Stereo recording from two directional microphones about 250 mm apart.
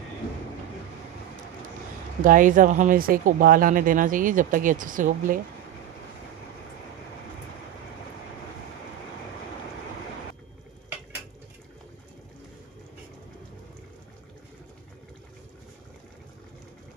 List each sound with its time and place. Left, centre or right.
2.2 s speech: right